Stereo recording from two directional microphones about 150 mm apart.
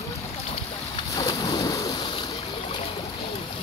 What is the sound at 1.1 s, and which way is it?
Boat, 25° left (ahead or behind).